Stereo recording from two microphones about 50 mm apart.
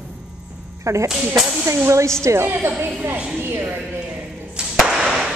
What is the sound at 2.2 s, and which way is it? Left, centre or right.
A woman's voice, right.